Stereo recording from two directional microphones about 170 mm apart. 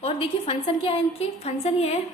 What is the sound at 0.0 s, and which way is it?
A woman's voice, 35° left (ahead or behind).